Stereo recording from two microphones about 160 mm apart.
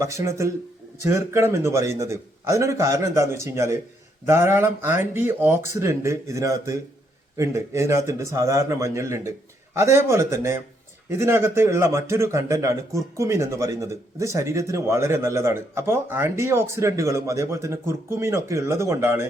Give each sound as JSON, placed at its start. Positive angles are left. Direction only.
{"t": 0.0, "sound": "a man's voice", "side_deg": -20}